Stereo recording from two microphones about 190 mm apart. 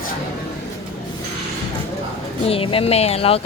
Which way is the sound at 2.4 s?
30° left (ahead or behind).